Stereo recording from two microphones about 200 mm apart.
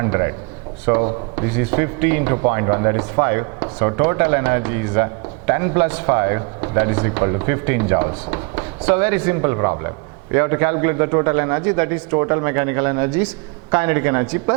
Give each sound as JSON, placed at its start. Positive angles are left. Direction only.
{"t": 0.0, "sound": "a man's voice", "side_deg": -20}